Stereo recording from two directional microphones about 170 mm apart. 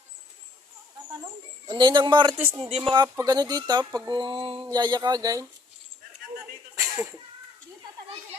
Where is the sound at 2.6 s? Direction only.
35° right (ahead or behind).